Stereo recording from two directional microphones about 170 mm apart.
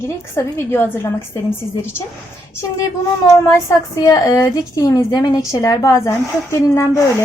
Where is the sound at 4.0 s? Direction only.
20° left (ahead or behind).